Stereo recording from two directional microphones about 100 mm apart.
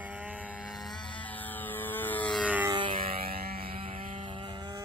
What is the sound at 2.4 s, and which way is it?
Music, 15° right (ahead or behind).